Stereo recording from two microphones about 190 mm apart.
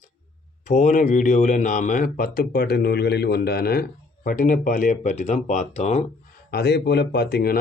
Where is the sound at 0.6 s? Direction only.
40° left (ahead or behind).